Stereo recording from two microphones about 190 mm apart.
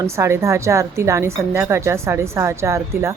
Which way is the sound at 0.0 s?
15° right (ahead or behind).